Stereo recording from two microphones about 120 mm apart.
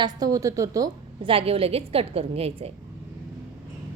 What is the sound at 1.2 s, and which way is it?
A woman's voice, 50° right (ahead or behind).